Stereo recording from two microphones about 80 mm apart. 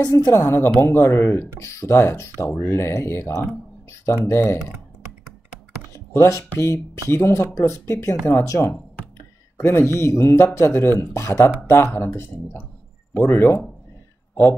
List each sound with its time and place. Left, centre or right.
0.0 s speech: left
5.9 s a sound: left
6.6 s speech: left